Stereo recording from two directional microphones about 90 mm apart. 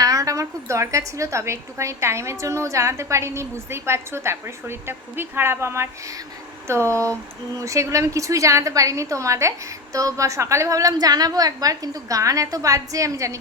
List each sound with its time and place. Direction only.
0.0 s a woman's voice: 40° right (ahead or behind)